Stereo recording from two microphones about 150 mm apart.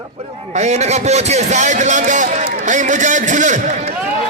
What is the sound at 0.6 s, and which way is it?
A man's voice, 50° right (ahead or behind).